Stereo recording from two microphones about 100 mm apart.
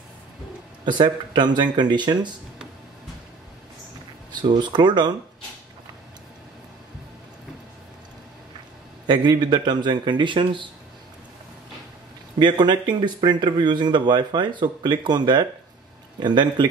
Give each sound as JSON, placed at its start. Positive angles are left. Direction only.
{"t": 0.8, "sound": "speech", "side_deg": -50}
{"t": 4.3, "sound": "speech", "side_deg": -50}
{"t": 9.0, "sound": "speech", "side_deg": -50}
{"t": 12.4, "sound": "speech", "side_deg": -50}